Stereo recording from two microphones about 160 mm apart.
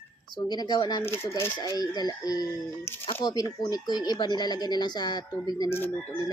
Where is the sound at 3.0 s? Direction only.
30° left (ahead or behind).